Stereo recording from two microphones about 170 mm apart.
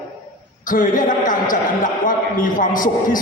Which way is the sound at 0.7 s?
50° left (ahead or behind).